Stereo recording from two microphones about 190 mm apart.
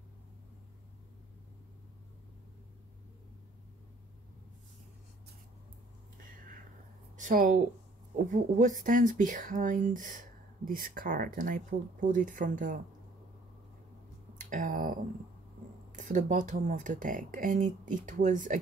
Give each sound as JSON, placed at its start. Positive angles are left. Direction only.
{"t": 7.2, "sound": "speech", "side_deg": -40}
{"t": 14.4, "sound": "speech", "side_deg": -45}